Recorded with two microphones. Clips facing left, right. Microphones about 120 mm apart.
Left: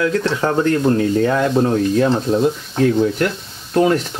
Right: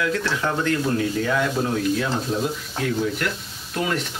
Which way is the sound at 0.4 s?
40° left (ahead or behind).